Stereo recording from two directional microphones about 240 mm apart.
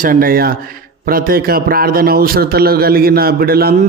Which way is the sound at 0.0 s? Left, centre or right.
Right.